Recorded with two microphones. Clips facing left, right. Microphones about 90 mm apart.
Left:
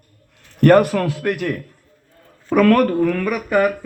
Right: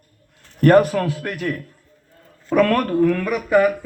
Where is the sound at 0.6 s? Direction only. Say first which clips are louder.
Left 1 dB; 65° left (ahead or behind).